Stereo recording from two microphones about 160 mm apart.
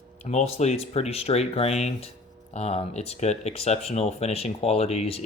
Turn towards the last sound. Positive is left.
turn(degrees=40)  # may be behind; listen again after turning